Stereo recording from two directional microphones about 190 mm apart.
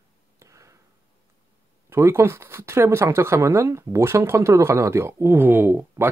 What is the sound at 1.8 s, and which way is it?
Speech, 15° right (ahead or behind).